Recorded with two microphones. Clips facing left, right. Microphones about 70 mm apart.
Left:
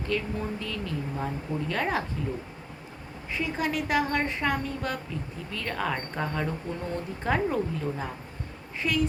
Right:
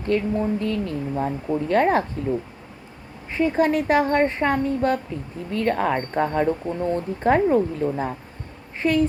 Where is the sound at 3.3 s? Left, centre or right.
Right.